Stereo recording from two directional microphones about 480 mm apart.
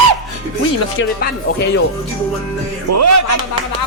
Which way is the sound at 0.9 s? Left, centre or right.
Left.